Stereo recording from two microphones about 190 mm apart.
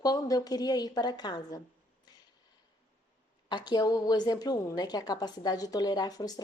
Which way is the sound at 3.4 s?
20° left (ahead or behind).